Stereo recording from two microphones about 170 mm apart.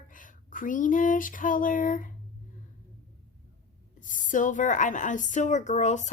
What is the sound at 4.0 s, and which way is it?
Speech, 50° left (ahead or behind).